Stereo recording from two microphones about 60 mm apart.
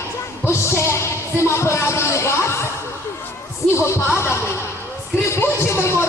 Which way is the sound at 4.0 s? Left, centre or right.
Left.